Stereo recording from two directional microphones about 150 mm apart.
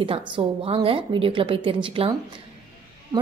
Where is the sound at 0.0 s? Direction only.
35° right (ahead or behind).